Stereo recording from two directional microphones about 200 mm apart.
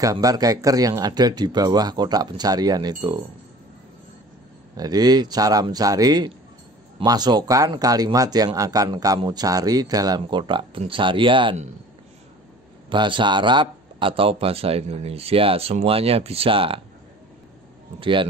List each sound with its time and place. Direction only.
0.0 s speech: 15° right (ahead or behind)
4.7 s speech: 20° right (ahead or behind)
12.9 s speech: 25° right (ahead or behind)